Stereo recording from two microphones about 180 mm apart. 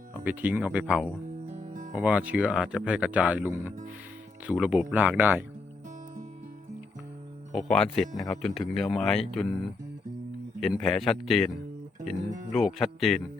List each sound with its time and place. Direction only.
0.3 s speech: 10° right (ahead or behind)
1.5 s music: 45° right (ahead or behind)
1.9 s speech: 5° right (ahead or behind)
7.5 s speech: centre (ahead or behind)
10.6 s speech: centre (ahead or behind)